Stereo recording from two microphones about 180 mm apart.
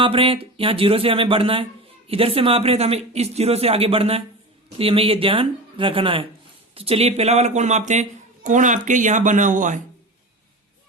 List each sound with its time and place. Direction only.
0.0 s a woman's voice: 30° right (ahead or behind)